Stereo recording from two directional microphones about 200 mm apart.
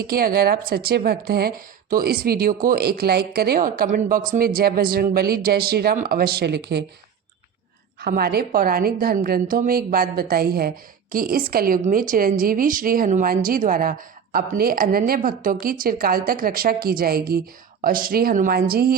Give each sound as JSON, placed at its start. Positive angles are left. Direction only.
{"t": 0.0, "sound": "a woman's voice", "side_deg": -45}
{"t": 8.0, "sound": "a woman's voice", "side_deg": -50}